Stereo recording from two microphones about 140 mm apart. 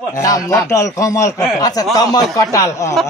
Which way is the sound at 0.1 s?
25° left (ahead or behind).